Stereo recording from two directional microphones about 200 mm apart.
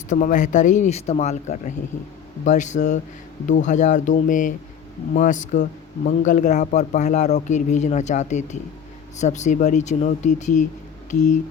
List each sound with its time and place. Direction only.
0.1 s speech: 40° left (ahead or behind)